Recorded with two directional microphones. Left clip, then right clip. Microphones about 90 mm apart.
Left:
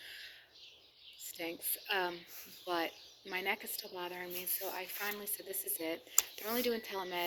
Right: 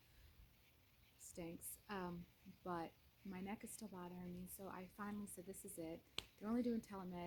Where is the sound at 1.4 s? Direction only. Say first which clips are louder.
Left 12 dB; 40° right (ahead or behind).